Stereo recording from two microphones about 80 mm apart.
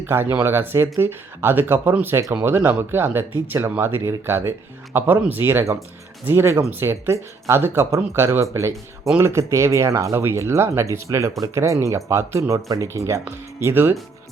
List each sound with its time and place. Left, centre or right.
0.0 s speech: right